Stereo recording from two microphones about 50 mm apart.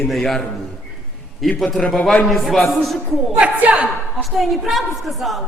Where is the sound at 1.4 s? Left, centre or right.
Centre.